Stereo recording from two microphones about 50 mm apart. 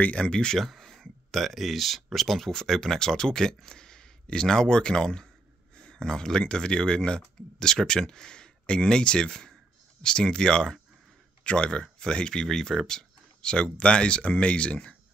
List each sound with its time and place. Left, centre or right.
0.0 s speech: left
0.6 s speech: centre; by 15.0 s left